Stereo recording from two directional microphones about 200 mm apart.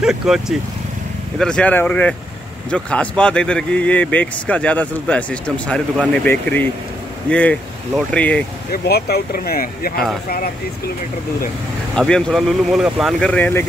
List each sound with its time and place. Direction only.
0.0 s speech: 5° right (ahead or behind)
8.7 s speech: 50° left (ahead or behind)
11.9 s speech: 5° left (ahead or behind)